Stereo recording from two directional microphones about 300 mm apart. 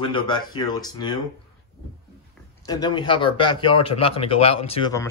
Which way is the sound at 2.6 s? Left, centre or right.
Centre.